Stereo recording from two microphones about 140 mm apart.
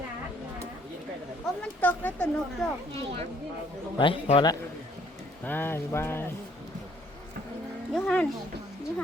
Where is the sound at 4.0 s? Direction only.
40° left (ahead or behind).